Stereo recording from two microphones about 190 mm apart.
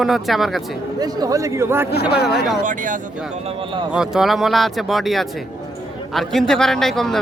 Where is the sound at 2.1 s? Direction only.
60° left (ahead or behind).